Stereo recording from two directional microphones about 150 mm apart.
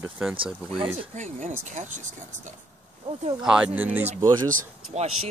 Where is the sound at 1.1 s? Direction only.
55° right (ahead or behind).